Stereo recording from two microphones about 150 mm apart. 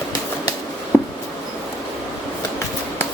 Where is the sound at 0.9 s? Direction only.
15° left (ahead or behind).